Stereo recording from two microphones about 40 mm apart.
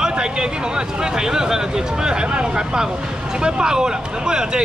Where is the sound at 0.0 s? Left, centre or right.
Centre.